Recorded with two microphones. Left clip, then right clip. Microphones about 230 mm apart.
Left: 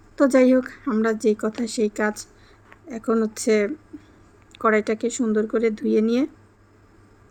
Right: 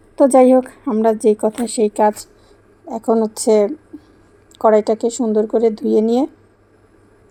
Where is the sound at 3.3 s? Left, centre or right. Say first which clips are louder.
Right 8 dB; centre.